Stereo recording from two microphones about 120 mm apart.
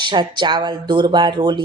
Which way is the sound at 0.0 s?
40° right (ahead or behind).